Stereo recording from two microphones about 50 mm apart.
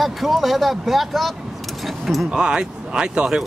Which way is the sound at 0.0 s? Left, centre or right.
Centre.